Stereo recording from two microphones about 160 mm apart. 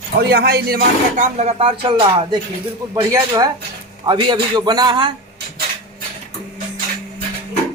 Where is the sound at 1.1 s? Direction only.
45° right (ahead or behind).